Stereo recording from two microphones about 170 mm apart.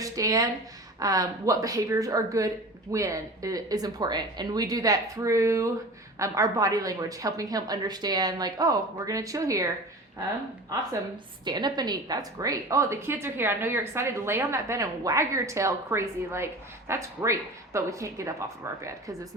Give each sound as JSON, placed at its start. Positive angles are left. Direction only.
{"t": 0.0, "sound": "a woman's voice", "side_deg": -20}
{"t": 11.4, "sound": "a woman's voice", "side_deg": -25}